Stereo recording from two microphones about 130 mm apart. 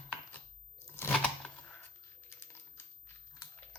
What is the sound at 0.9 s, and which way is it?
Crunch, 15° left (ahead or behind).